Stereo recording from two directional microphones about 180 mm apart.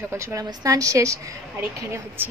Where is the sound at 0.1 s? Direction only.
15° right (ahead or behind).